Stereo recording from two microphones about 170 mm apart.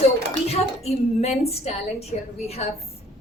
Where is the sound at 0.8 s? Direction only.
40° left (ahead or behind).